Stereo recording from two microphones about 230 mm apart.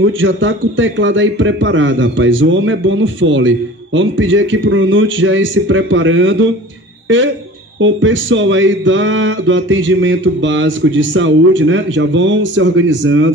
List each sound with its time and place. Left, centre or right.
0.0 s a man's voice: right
7.8 s a man's voice: right